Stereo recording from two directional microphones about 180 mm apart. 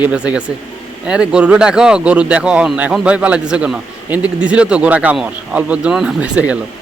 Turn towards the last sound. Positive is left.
turn(degrees=-5)  # may be behind; listen again after turning